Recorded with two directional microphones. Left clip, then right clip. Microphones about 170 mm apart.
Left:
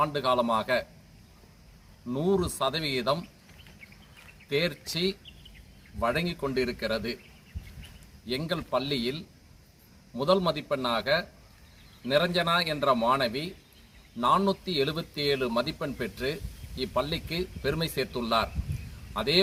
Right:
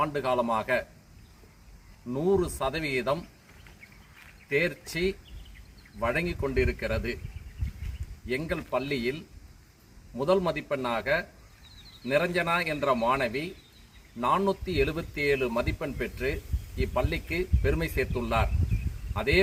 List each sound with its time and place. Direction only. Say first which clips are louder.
0.1 s a man's voice: left 1 dB; 20° right (ahead or behind)
2.1 s a man's voice: right 1 dB; 20° right (ahead or behind)
4.5 s a man's voice: right 1 dB; 20° right (ahead or behind)
6.0 s a man's voice: even; 20° right (ahead or behind)
8.4 s a man's voice: left 3 dB; 20° right (ahead or behind)
10.2 s a man's voice: left 1 dB; 20° right (ahead or behind)